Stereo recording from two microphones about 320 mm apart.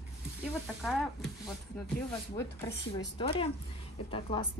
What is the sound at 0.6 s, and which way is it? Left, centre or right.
Speech, centre.